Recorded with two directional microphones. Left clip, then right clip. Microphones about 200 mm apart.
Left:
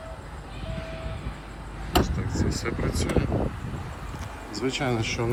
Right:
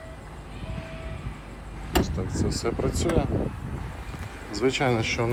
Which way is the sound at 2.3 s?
25° right (ahead or behind).